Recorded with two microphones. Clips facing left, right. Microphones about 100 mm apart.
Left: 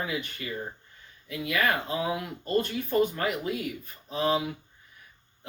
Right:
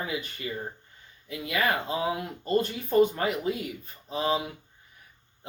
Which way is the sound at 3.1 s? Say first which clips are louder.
Right 1 dB; 30° right (ahead or behind).